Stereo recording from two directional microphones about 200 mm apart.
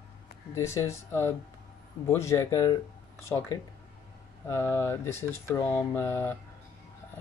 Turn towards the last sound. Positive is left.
turn(degrees=10)  # may be behind; listen again after turning